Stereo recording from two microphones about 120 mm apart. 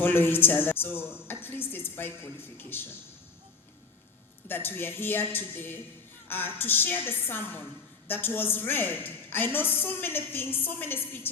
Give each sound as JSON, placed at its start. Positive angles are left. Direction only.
{"t": 0.0, "sound": "a woman's voice", "side_deg": 15}
{"t": 4.4, "sound": "a woman's voice", "side_deg": 15}